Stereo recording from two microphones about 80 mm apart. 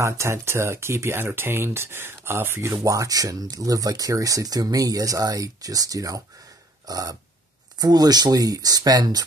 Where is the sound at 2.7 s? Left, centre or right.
Right.